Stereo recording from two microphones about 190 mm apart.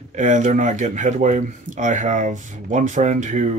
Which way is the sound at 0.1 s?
40° right (ahead or behind).